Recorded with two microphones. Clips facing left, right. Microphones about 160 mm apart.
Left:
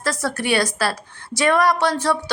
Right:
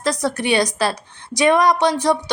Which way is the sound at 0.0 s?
20° right (ahead or behind).